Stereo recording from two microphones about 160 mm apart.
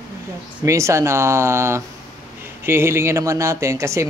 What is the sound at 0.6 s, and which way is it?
A man's voice, 20° right (ahead or behind).